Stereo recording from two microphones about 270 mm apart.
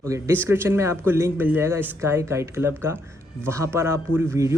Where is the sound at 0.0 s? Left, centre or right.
Centre.